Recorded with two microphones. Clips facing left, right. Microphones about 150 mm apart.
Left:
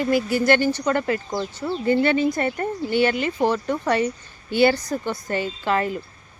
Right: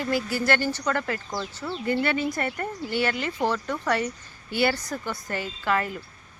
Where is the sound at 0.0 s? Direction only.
20° left (ahead or behind).